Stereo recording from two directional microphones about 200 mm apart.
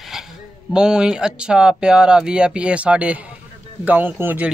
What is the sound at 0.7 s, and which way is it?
Speech, 5° right (ahead or behind).